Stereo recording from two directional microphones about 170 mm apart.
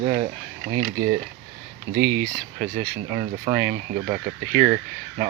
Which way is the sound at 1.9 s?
50° right (ahead or behind).